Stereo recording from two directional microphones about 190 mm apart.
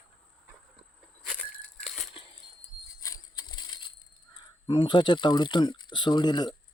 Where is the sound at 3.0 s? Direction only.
20° left (ahead or behind).